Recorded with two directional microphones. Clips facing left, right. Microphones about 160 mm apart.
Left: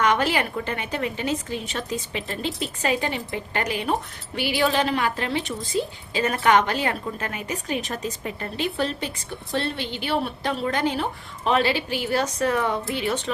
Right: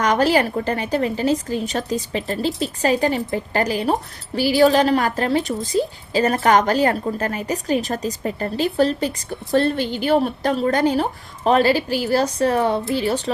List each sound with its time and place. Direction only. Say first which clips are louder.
0.0 s a woman's voice: right 5 dB; 40° right (ahead or behind)